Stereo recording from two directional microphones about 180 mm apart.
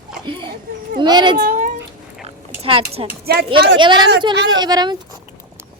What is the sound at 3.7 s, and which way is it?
Speech, 25° right (ahead or behind).